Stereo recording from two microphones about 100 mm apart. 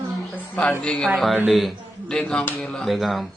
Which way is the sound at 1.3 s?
Centre (ahead or behind).